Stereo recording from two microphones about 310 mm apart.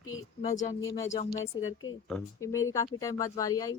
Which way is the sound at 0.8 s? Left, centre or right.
Left.